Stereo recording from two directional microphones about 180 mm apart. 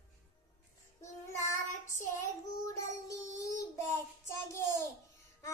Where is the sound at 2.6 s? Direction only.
15° left (ahead or behind).